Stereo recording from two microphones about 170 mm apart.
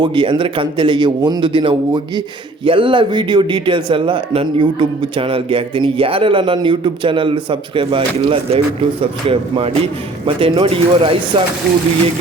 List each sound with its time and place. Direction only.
0.0 s a man's voice: 30° right (ahead or behind)